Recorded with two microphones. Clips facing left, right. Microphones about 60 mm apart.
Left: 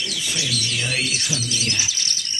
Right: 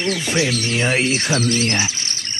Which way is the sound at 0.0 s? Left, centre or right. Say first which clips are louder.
Right 8 dB; right.